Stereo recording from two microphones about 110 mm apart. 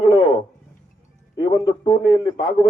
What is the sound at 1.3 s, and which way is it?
A man's voice, 40° left (ahead or behind).